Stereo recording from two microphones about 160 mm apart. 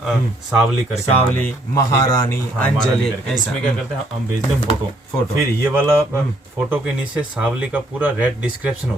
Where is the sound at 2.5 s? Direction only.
5° left (ahead or behind).